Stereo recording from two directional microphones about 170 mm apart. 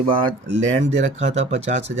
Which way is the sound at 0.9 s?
45° right (ahead or behind).